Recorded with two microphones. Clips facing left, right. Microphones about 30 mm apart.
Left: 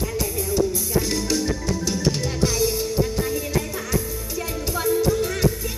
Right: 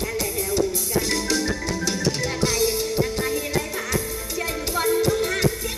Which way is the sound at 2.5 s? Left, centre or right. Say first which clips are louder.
Even; centre.